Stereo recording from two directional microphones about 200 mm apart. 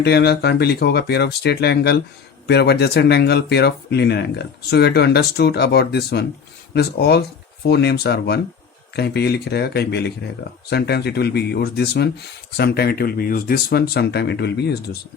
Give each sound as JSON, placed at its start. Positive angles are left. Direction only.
{"t": 0.0, "sound": "speech", "side_deg": 55}